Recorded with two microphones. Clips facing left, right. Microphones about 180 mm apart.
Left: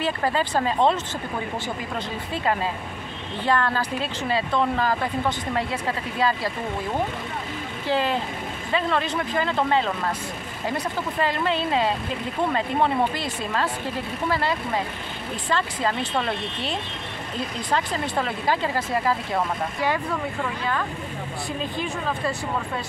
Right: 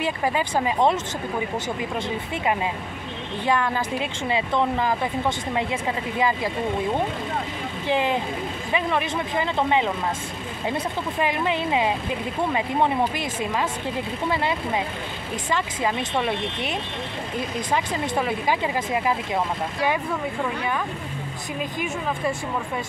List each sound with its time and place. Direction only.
0.0 s speech: 15° right (ahead or behind)
3.4 s speech: 15° right (ahead or behind)
7.9 s speech: 20° right (ahead or behind)
17.7 s speech: 15° right (ahead or behind)
21.5 s speech: 15° right (ahead or behind)